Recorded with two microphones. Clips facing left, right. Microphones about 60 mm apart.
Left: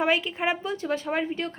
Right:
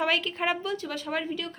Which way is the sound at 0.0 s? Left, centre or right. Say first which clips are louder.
Left 2 dB; left.